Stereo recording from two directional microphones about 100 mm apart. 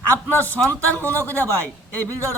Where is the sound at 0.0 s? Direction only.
15° left (ahead or behind).